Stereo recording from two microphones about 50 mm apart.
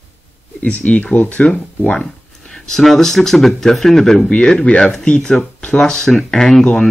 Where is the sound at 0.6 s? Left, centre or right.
Left.